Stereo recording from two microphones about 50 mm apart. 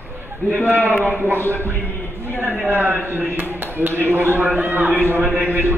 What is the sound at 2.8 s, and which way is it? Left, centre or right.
A man's voice, right.